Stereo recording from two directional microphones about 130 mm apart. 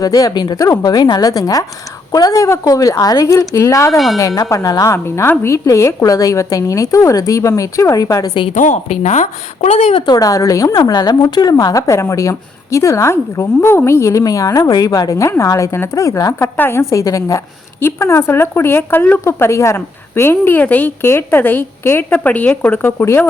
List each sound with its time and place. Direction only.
0.0 s a woman's voice: 30° left (ahead or behind)
3.9 s a woman's voice: centre (ahead or behind)
4.2 s a woman's voice: 25° left (ahead or behind)
8.5 s a woman's voice: 75° left (ahead or behind)
10.1 s a woman's voice: 30° left (ahead or behind)